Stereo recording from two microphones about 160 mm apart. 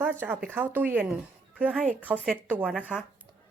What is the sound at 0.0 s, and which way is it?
A woman's voice, 10° right (ahead or behind).